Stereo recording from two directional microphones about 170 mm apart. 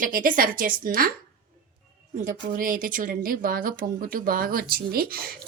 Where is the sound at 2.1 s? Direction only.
55° right (ahead or behind).